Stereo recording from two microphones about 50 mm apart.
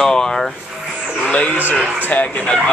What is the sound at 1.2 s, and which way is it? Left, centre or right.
Speech, left.